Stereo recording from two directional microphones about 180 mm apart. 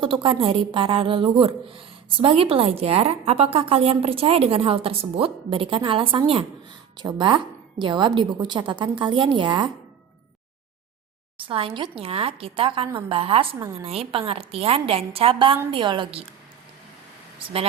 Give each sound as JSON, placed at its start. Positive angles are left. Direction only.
{"t": 0.0, "sound": "a woman's voice", "side_deg": -30}
{"t": 11.4, "sound": "a woman's voice", "side_deg": -30}